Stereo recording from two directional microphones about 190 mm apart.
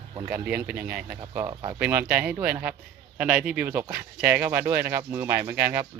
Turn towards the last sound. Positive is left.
turn(degrees=-10)  # may be behind; listen again after turning